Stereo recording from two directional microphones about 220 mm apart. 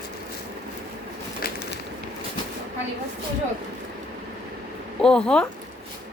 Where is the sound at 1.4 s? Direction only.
40° left (ahead or behind).